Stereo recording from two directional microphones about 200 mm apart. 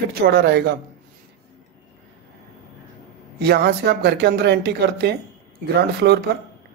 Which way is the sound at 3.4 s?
55° right (ahead or behind).